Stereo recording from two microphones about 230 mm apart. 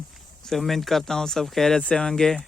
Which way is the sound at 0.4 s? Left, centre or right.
Centre.